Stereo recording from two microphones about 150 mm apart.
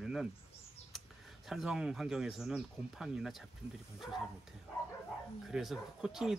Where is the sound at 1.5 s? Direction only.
5° right (ahead or behind).